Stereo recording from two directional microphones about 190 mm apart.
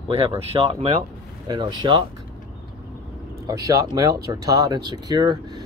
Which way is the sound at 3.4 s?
20° right (ahead or behind).